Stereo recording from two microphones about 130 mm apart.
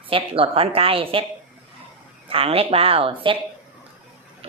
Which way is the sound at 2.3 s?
45° right (ahead or behind).